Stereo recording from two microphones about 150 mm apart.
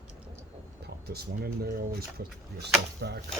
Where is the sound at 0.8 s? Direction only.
90° right.